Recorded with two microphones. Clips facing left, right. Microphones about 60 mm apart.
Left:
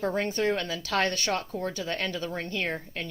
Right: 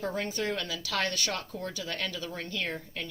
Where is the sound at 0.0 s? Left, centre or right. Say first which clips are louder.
Left 5 dB; left.